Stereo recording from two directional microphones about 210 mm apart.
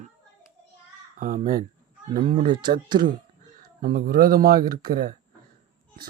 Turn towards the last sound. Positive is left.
turn(degrees=-45)  # may be behind; listen again after turning